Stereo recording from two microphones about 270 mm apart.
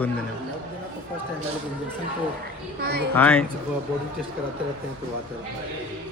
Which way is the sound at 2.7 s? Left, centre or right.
Right.